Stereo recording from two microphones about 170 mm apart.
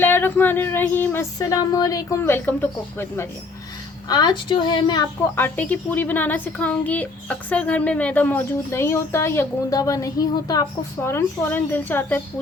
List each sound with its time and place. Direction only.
0.0 s a woman's voice: 10° left (ahead or behind)
4.1 s speech: 25° left (ahead or behind)
5.2 s a woman's voice: 10° left (ahead or behind)